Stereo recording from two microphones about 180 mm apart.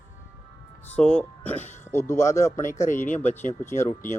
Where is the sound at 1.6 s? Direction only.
40° left (ahead or behind).